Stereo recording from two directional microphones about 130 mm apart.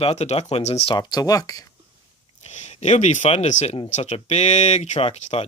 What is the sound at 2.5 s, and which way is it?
Speech, 60° left (ahead or behind).